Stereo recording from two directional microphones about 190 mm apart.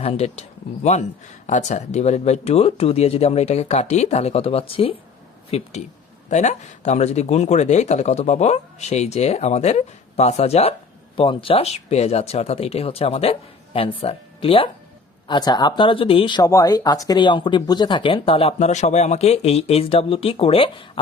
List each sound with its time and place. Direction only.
0.0 s speech: 35° left (ahead or behind)